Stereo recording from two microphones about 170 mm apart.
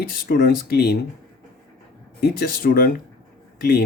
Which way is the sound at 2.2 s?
65° left (ahead or behind).